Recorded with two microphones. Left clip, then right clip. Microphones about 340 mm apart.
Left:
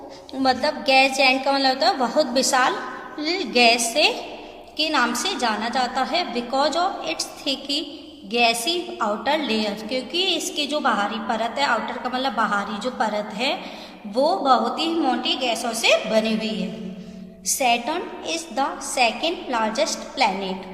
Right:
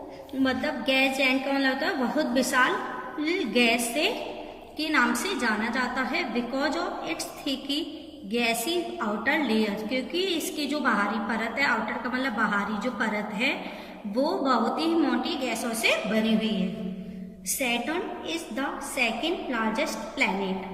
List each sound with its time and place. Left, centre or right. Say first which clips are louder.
0.4 s a woman's voice: left 7 dB; centre